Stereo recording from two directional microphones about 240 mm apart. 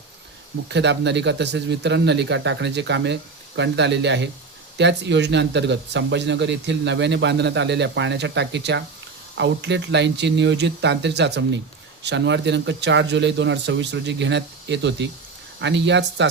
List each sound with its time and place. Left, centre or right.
0.7 s speech: right